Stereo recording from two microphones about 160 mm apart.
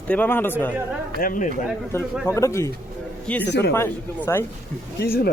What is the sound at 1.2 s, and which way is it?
Speech, 55° left (ahead or behind).